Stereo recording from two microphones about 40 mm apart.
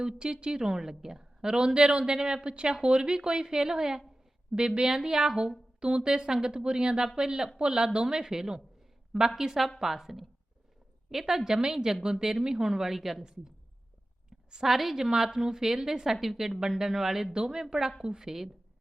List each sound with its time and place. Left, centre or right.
0.0 s a woman's voice: right
14.6 s a woman's voice: centre